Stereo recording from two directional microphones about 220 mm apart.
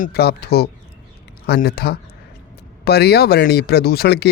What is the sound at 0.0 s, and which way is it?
Speech, 45° left (ahead or behind).